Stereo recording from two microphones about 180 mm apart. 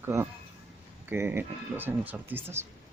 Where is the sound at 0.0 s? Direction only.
15° right (ahead or behind).